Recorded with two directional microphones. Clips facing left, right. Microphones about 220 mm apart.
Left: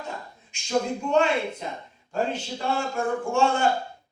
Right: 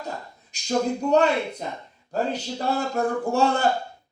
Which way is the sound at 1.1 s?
40° right (ahead or behind).